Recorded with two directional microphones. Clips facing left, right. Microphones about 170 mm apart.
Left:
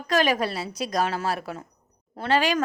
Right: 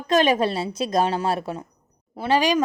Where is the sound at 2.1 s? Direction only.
10° right (ahead or behind).